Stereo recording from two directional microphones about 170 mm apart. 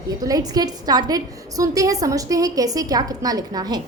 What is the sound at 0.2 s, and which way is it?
A woman's voice, 20° right (ahead or behind).